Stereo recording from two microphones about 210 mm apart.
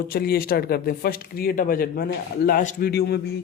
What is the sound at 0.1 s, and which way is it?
Speech, 45° left (ahead or behind).